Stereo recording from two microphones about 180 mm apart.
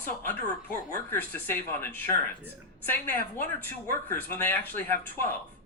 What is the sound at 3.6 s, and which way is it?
Speech, 10° left (ahead or behind).